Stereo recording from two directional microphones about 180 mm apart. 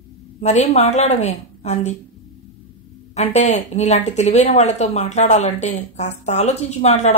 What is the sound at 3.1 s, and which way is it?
A woman's voice, 40° left (ahead or behind).